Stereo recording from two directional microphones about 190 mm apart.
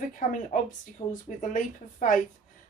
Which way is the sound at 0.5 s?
45° left (ahead or behind).